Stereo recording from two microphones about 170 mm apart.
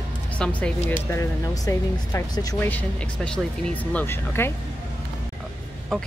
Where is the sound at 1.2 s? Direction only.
20° left (ahead or behind).